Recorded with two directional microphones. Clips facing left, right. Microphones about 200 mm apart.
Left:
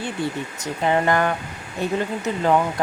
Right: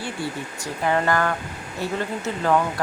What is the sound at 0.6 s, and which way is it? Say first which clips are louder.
Speech: left 2 dB; 20° left (ahead or behind).